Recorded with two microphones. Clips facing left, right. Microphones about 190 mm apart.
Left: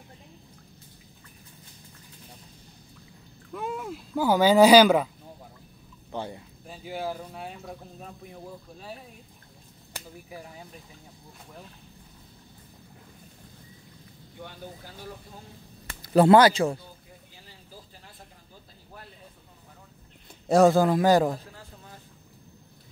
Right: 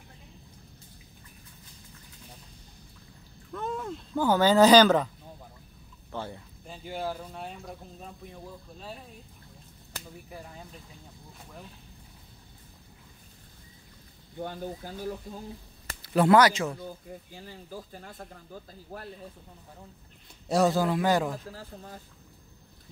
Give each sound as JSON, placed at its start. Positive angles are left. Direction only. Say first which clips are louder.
{"t": 3.5, "sound": "speech", "louder": "left 1 dB", "side_deg": 10}
{"t": 6.1, "sound": "speech", "louder": "left 2 dB", "side_deg": 15}
{"t": 6.6, "sound": "speech", "louder": "left 1 dB", "side_deg": 5}
{"t": 14.4, "sound": "speech", "louder": "right 7 dB", "side_deg": -45}
{"t": 16.0, "sound": "speech", "louder": "left 4 dB", "side_deg": 35}
{"t": 17.5, "sound": "speech", "louder": "right 8 dB", "side_deg": -50}
{"t": 20.4, "sound": "a man's voice", "louder": "left 6 dB", "side_deg": 50}
{"t": 21.5, "sound": "a woman's voice", "louder": "right 5 dB", "side_deg": -40}